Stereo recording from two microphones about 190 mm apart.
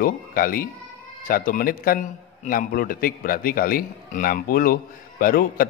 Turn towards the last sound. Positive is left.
turn(degrees=50)  # may be behind; listen again after turning